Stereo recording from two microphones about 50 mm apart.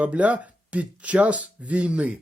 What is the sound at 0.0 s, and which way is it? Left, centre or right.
Speech, right.